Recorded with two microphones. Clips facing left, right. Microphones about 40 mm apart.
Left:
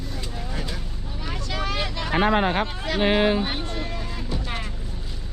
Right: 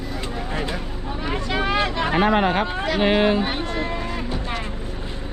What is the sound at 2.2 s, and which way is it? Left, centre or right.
Speech, right.